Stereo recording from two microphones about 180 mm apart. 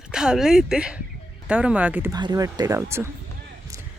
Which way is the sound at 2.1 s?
20° right (ahead or behind).